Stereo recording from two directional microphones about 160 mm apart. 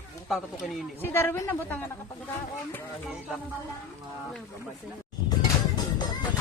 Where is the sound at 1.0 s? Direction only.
15° left (ahead or behind).